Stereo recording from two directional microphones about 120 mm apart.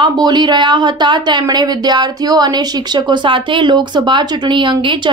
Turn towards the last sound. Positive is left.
turn(degrees=-40)  # may be behind; listen again after turning